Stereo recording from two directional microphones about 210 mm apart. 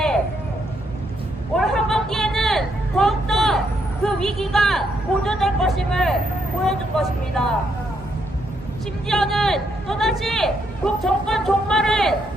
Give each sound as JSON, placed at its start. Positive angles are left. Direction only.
{"t": 1.5, "sound": "vehicle", "side_deg": 0}
{"t": 4.0, "sound": "a sound", "side_deg": 0}
{"t": 6.7, "sound": "speech", "side_deg": 0}
{"t": 9.0, "sound": "speech", "side_deg": 0}